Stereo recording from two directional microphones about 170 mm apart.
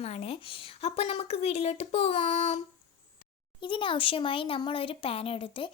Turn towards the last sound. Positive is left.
turn(degrees=30)  # may be behind; listen again after turning